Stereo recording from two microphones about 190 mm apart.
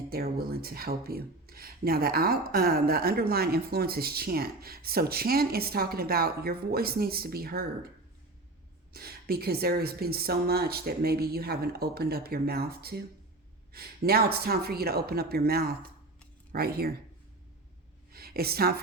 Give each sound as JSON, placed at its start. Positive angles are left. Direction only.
{"t": 0.1, "sound": "speech", "side_deg": -55}
{"t": 8.9, "sound": "speech", "side_deg": -55}
{"t": 18.1, "sound": "a sound", "side_deg": -55}